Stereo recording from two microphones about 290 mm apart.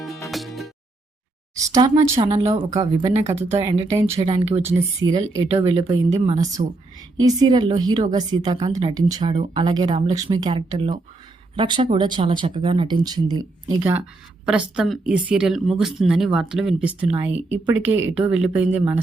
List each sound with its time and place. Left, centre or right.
0.3 s music: centre
1.5 s a woman's voice: centre
18.1 s speech: centre